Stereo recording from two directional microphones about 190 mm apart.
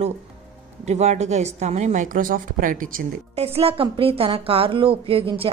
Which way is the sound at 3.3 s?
30° right (ahead or behind).